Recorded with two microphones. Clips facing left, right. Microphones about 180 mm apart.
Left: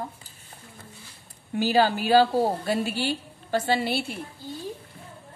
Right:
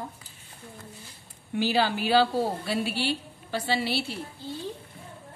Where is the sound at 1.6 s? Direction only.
45° left (ahead or behind).